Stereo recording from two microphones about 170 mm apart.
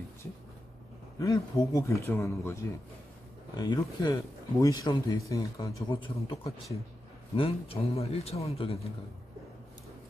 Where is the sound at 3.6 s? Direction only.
20° left (ahead or behind).